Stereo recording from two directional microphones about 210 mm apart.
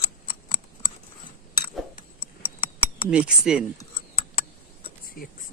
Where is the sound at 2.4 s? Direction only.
25° left (ahead or behind).